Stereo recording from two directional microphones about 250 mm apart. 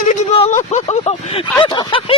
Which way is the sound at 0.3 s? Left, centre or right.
Left.